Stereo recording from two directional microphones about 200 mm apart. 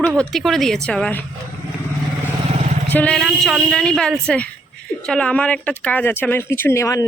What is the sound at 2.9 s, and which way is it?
A woman's voice, 5° left (ahead or behind).